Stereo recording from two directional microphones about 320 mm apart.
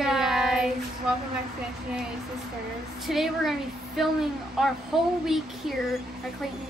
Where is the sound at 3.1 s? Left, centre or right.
Centre.